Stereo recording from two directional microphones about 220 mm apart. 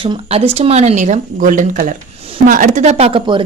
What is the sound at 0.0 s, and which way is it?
A woman's voice, 25° right (ahead or behind).